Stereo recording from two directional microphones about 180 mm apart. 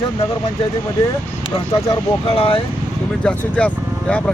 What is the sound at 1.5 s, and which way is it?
Speech, 20° left (ahead or behind).